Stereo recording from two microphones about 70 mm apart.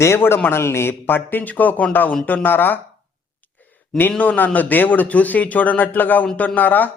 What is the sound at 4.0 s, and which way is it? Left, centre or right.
A man's voice, left.